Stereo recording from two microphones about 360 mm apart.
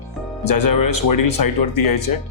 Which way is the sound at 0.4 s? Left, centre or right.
Left.